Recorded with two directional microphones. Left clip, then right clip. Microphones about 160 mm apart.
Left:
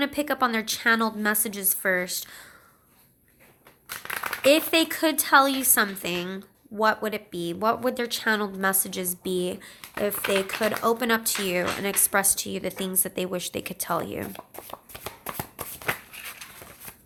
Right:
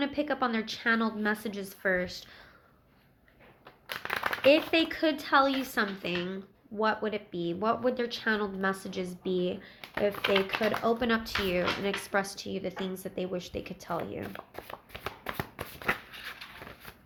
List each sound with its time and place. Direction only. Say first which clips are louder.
0.0 s a woman's voice: left 5 dB; 30° left (ahead or behind)
4.2 s speech: left 3 dB; 25° left (ahead or behind)
10.2 s speech: left 2 dB; 5° left (ahead or behind)
10.6 s a woman's voice: left 4 dB; 30° left (ahead or behind)
14.9 s shuffling cards: left 1 dB; 25° left (ahead or behind)